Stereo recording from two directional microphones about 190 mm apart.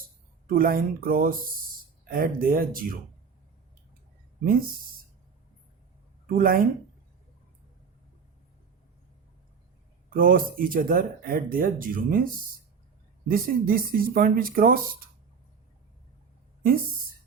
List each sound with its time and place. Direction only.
0.4 s speech: 50° right (ahead or behind)
6.2 s speech: 50° right (ahead or behind)
10.1 s speech: 45° right (ahead or behind)